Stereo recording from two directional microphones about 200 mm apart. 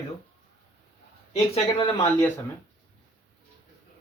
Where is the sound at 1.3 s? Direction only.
30° left (ahead or behind).